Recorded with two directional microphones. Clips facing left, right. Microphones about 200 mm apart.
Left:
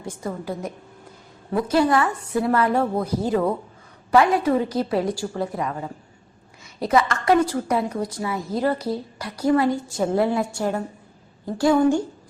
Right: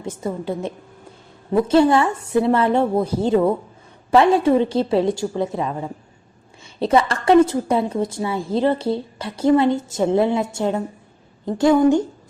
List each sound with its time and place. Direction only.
0.0 s a woman's voice: 20° right (ahead or behind)